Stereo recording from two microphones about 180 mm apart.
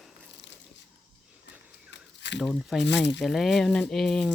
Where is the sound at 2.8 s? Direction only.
75° left (ahead or behind).